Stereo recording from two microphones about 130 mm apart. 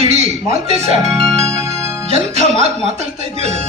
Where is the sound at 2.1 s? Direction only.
55° right (ahead or behind).